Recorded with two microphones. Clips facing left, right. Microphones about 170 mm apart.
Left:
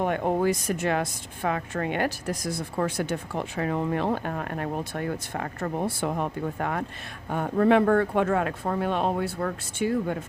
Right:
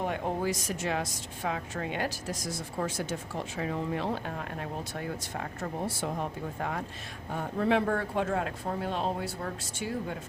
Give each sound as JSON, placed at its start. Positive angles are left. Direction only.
{"t": 0.0, "sound": "speech", "side_deg": 60}